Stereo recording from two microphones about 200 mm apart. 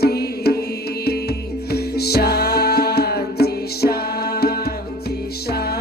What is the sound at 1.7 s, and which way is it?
Music, 55° left (ahead or behind).